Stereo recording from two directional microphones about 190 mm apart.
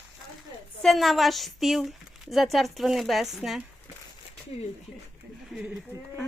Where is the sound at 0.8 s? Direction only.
Centre (ahead or behind).